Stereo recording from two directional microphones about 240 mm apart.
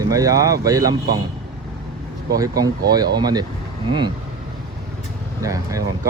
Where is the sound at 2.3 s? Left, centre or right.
Centre.